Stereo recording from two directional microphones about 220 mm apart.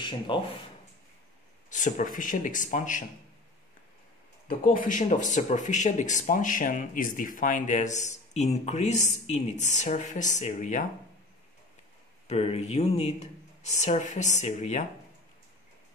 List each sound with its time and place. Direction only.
0.0 s speech: 20° left (ahead or behind)
1.7 s speech: 35° left (ahead or behind)
4.5 s speech: 35° left (ahead or behind)
12.3 s speech: 30° left (ahead or behind)